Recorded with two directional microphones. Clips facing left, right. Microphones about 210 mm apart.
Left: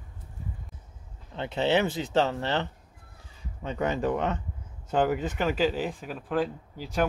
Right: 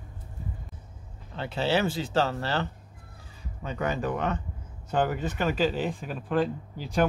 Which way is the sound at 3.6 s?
25° left (ahead or behind).